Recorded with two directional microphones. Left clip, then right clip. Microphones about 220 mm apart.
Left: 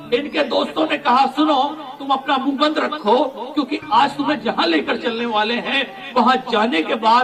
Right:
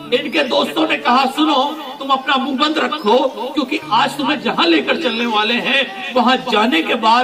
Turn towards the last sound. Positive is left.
turn(degrees=40)  # may be behind; listen again after turning